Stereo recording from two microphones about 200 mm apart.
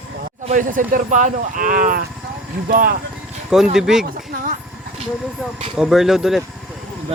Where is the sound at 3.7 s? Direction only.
5° right (ahead or behind).